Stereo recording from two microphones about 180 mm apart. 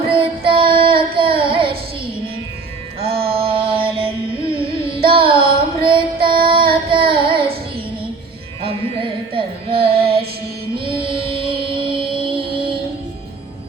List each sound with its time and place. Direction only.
0.1 s child singing: 30° right (ahead or behind)
3.1 s music: 60° right (ahead or behind)
3.3 s carnatic music: 30° right (ahead or behind)
6.2 s child singing: 30° right (ahead or behind)
8.6 s carnatic music: 30° right (ahead or behind)
10.8 s music: 30° right (ahead or behind)